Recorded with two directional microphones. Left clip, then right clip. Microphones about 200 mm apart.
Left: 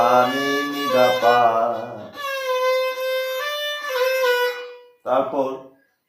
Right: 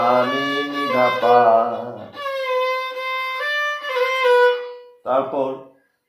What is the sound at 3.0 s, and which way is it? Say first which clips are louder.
Music: left 1 dB; 45° right (ahead or behind).